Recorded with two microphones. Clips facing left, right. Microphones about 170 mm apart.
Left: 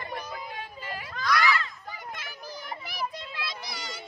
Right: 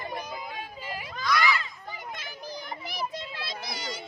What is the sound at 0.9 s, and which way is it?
Children playing, 10° right (ahead or behind).